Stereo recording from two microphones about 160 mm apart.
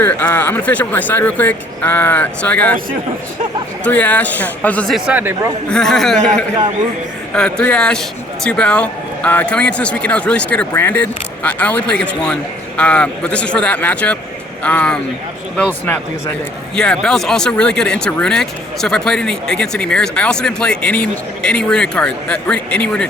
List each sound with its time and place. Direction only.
0.0 s a man's voice: 10° left (ahead or behind)
3.8 s a man's voice: 10° left (ahead or behind); by 5.3 s 10° right (ahead or behind)
5.7 s a man's voice: centre (ahead or behind)